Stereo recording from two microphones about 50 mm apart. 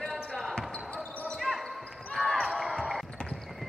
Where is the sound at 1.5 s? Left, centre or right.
Centre.